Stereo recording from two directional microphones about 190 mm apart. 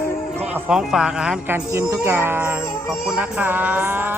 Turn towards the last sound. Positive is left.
turn(degrees=-10)  # may be behind; listen again after turning